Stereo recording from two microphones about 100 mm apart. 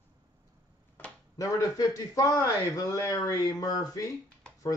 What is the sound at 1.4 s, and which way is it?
Speech, 35° left (ahead or behind).